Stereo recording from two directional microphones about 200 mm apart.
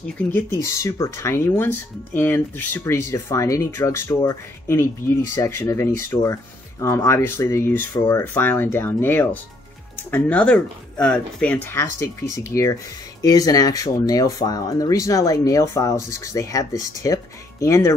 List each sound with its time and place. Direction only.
0.0 s speech: 10° left (ahead or behind)